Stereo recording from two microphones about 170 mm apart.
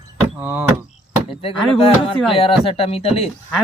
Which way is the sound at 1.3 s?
35° left (ahead or behind).